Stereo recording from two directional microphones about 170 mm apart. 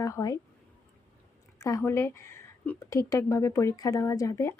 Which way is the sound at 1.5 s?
20° left (ahead or behind).